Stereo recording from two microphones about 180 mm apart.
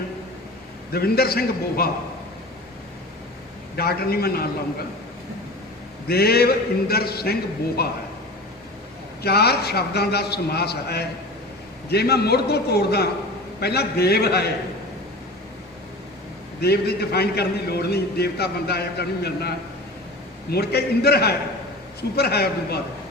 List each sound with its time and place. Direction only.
0.9 s a man's voice: 60° left (ahead or behind)
3.8 s a man's voice: 60° left (ahead or behind)
6.1 s a man's voice: 60° left (ahead or behind)
9.2 s a man's voice: 60° left (ahead or behind)
16.6 s a man's voice: 60° left (ahead or behind)